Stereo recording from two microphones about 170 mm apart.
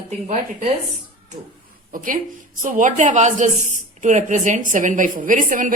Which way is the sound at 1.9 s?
55° right (ahead or behind).